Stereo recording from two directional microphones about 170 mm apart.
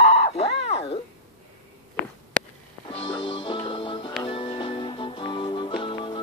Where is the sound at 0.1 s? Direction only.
35° left (ahead or behind).